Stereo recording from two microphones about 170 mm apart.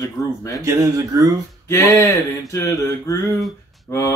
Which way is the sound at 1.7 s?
15° left (ahead or behind).